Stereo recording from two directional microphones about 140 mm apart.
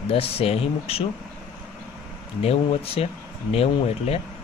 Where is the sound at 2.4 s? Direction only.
45° left (ahead or behind).